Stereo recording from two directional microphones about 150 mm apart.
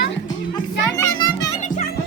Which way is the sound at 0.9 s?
25° left (ahead or behind).